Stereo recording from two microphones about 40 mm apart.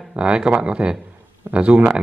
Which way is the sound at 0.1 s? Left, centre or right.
Right.